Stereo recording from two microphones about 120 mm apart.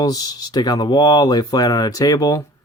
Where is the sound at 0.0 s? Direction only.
35° left (ahead or behind).